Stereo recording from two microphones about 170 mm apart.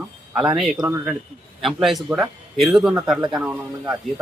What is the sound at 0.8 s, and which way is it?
Speech, 15° right (ahead or behind).